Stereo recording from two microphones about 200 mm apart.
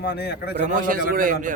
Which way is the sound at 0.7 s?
45° right (ahead or behind).